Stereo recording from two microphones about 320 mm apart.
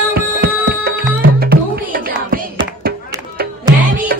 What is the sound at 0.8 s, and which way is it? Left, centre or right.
Music, right.